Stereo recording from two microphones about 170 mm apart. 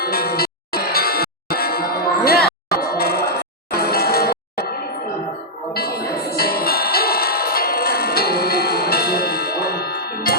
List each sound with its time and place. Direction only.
0.0 s music: 65° left (ahead or behind)
5.7 s music: 65° left (ahead or behind)